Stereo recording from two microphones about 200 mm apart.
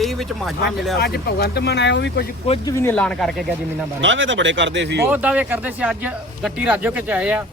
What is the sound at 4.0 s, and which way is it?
Speech, 70° right (ahead or behind).